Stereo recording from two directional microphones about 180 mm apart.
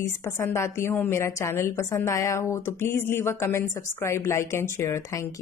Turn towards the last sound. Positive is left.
turn(degrees=15)  # may be behind; listen again after turning